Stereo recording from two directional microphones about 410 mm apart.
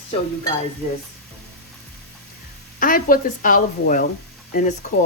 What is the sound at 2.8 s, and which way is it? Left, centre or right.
A woman's voice, centre.